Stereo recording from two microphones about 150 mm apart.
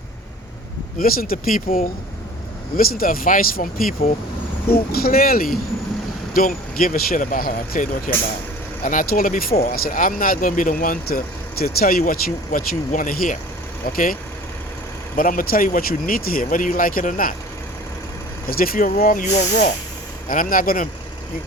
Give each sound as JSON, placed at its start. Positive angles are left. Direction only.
{"t": 0.9, "sound": "speech", "side_deg": 75}
{"t": 4.9, "sound": "speech", "side_deg": 85}
{"t": 11.6, "sound": "speech", "side_deg": 80}
{"t": 18.4, "sound": "speech", "side_deg": 75}
{"t": 20.2, "sound": "speech", "side_deg": 65}